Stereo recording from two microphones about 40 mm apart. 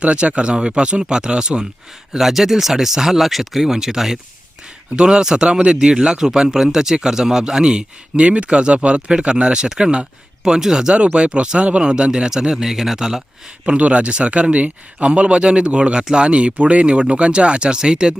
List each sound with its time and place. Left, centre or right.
0.0 s speech: right
2.1 s speech: centre; by 9.0 s right
9.0 s speech: centre
10.9 s speech: right; by 13.2 s centre
13.7 s speech: right